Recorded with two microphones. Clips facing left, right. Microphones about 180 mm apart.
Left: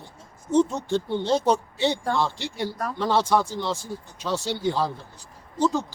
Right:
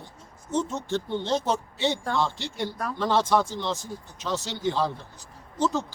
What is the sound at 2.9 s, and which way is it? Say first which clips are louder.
Speech: left 1 dB; 10° left (ahead or behind).